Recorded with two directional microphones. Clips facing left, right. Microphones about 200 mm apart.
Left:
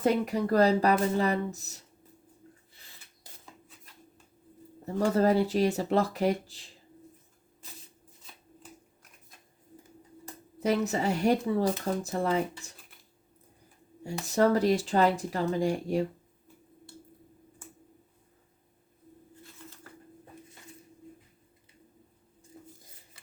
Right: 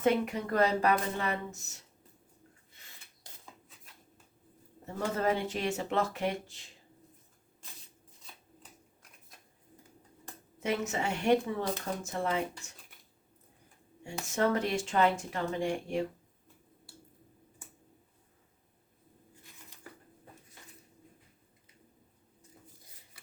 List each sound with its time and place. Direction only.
0.0 s speech: 35° left (ahead or behind)
4.9 s speech: 35° left (ahead or behind)
10.6 s speech: 35° left (ahead or behind)
14.3 s speech: 35° left (ahead or behind)
22.5 s a sound: 40° left (ahead or behind)